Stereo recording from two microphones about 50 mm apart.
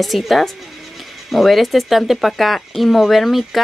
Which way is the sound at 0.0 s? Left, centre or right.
Centre.